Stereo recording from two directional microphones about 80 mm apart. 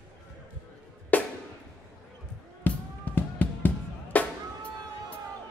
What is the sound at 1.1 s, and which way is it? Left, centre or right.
Music, left.